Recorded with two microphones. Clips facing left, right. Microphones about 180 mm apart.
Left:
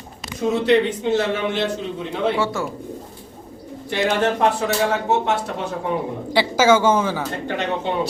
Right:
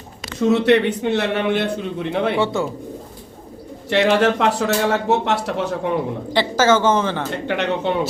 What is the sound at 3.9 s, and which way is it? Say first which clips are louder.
A man's voice: right 4 dB; 80° right.